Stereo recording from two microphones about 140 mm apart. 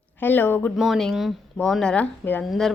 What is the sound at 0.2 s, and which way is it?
Speech, 15° left (ahead or behind).